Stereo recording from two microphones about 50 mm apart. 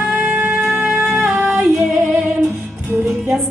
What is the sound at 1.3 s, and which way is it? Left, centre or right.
Female singing, centre.